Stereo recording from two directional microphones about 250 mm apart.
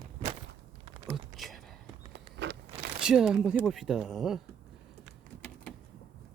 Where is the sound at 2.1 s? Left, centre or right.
Right.